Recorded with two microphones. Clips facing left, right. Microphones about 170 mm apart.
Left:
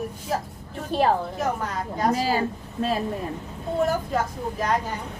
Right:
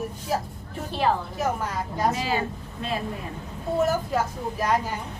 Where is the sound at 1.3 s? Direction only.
Centre (ahead or behind).